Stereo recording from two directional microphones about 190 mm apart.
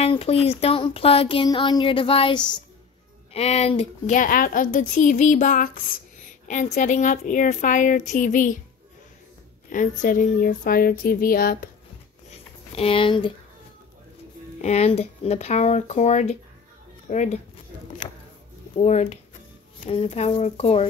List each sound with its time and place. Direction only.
0.0 s a sound: 30° left (ahead or behind)
3.3 s a woman's voice: 35° left (ahead or behind)
9.7 s speech: 45° left (ahead or behind)
12.3 s a sound: 30° left (ahead or behind)
14.6 s a woman's voice: 35° left (ahead or behind)
18.8 s a woman's voice: 35° left (ahead or behind)